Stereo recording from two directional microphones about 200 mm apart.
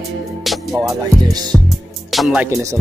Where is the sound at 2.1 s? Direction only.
Centre (ahead or behind).